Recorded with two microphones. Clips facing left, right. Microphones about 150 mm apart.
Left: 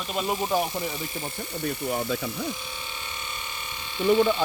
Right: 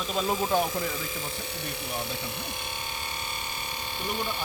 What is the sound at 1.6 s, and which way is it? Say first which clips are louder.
Speech: left 9 dB; 90° left.